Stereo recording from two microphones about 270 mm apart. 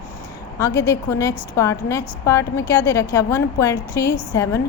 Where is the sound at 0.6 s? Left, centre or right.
Centre.